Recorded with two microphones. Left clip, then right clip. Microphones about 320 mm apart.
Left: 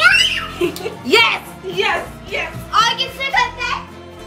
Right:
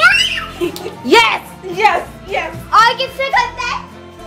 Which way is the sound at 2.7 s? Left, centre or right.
Right.